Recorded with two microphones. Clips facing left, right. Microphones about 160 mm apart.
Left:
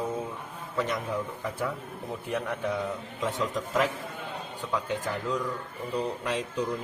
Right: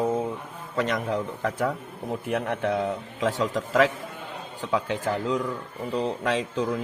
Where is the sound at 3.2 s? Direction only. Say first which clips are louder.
Right 5 dB; 90° right.